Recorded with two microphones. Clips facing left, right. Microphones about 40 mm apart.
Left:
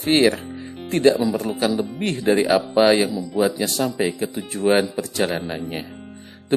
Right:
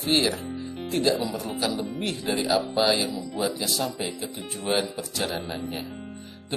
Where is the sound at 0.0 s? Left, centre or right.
Left.